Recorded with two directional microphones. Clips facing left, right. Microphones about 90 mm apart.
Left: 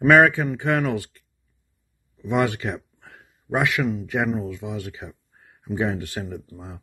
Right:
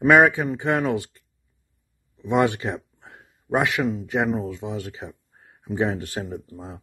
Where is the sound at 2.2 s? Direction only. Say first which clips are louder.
Right 2 dB; 20° right (ahead or behind).